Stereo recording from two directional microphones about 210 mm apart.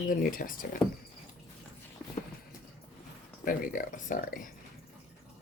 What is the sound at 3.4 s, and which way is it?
Speech, 40° left (ahead or behind).